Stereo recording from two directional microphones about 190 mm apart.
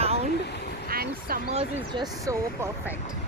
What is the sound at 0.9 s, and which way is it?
Speech, 50° right (ahead or behind).